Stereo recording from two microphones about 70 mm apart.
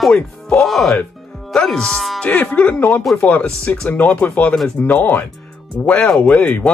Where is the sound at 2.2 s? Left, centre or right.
Centre.